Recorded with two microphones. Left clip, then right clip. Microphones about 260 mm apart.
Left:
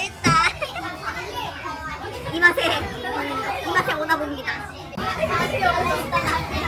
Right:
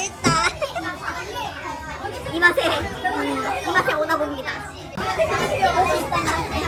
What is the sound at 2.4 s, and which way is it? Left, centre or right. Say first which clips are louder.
Children playing: even; centre.